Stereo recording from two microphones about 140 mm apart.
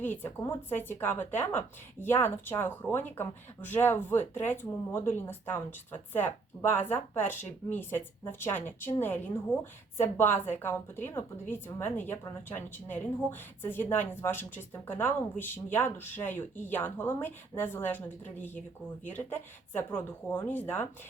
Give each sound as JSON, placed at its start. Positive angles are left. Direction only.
{"t": 0.0, "sound": "speech", "side_deg": 15}